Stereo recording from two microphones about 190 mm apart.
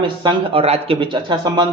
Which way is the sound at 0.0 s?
25° right (ahead or behind).